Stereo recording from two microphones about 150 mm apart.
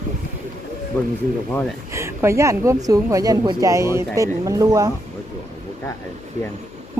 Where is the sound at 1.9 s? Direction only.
20° right (ahead or behind).